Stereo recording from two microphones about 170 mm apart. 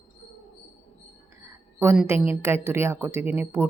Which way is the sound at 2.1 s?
15° right (ahead or behind).